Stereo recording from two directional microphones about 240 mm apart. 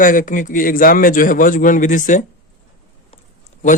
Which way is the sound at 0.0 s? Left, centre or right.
Left.